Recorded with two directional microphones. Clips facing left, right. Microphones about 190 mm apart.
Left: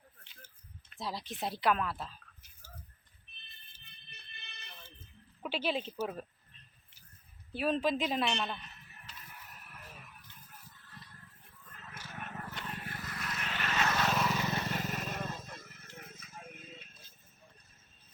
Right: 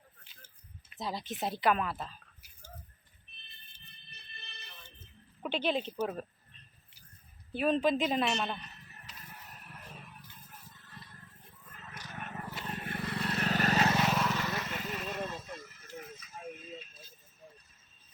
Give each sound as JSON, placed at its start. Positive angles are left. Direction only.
{"t": 0.9, "sound": "speech", "side_deg": 0}
{"t": 5.4, "sound": "a woman's voice", "side_deg": 5}
{"t": 7.5, "sound": "a woman's voice", "side_deg": 0}
{"t": 10.2, "sound": "a sound", "side_deg": -25}
{"t": 11.7, "sound": "vehicle", "side_deg": -5}
{"t": 12.1, "sound": "a sound", "side_deg": 0}
{"t": 12.4, "sound": "vehicle", "side_deg": -10}
{"t": 12.6, "sound": "vehicle", "side_deg": -25}
{"t": 14.1, "sound": "vehicle", "side_deg": 0}
{"t": 14.5, "sound": "a sound", "side_deg": 35}